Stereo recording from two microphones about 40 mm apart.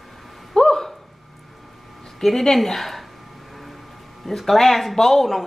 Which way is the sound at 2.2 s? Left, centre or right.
Centre.